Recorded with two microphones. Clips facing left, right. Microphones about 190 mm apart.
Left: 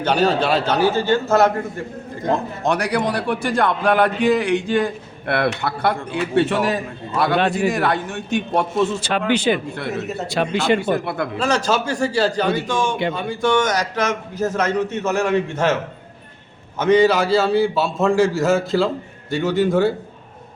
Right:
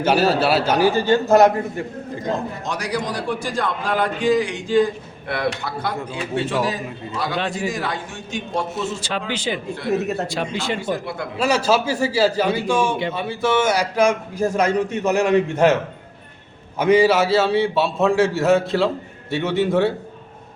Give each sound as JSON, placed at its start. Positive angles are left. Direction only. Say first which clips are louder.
{"t": 0.0, "sound": "a man's voice", "louder": "right 1 dB", "side_deg": -5}
{"t": 2.2, "sound": "a man's voice", "louder": "left 5 dB", "side_deg": 60}
{"t": 11.3, "sound": "a man's voice", "louder": "right 3 dB", "side_deg": -10}
{"t": 16.7, "sound": "a man's voice", "louder": "even", "side_deg": -10}